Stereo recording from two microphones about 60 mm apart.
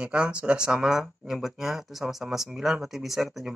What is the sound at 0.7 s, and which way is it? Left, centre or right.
Speech, centre.